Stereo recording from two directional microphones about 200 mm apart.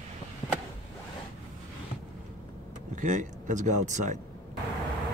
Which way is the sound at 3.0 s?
40° right (ahead or behind).